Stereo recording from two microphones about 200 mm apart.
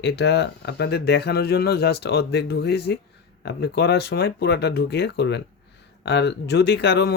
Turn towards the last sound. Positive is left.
turn(degrees=60)  # may be behind; listen again after turning